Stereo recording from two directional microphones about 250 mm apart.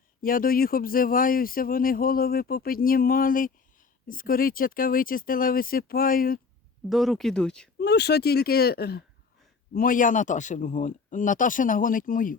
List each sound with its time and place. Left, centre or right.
0.2 s speech: left
6.9 s speech: centre
7.8 s speech: left